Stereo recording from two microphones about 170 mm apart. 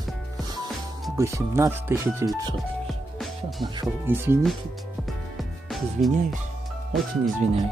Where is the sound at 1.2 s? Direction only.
15° right (ahead or behind).